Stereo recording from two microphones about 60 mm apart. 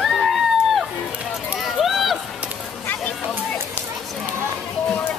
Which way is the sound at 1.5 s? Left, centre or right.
Centre.